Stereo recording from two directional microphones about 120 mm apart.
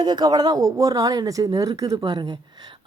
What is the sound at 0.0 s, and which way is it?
Speech, 35° right (ahead or behind).